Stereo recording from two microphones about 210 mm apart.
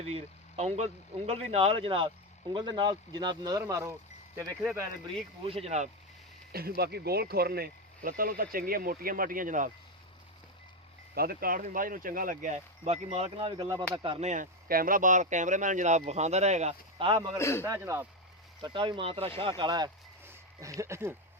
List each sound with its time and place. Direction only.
0.0 s speech: 30° right (ahead or behind)
5.4 s speech: 25° right (ahead or behind)
6.5 s speech: 45° right (ahead or behind)
11.1 s speech: 45° right (ahead or behind); by 17.2 s 25° right (ahead or behind)
17.3 s a man's voice: 10° left (ahead or behind)
17.6 s speech: 10° right (ahead or behind)